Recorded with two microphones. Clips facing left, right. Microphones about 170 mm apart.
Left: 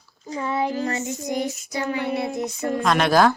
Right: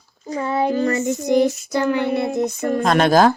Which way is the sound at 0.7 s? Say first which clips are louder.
Right 7 dB; 65° right (ahead or behind).